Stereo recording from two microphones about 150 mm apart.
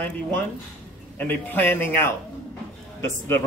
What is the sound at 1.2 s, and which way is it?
A man's voice, 15° left (ahead or behind).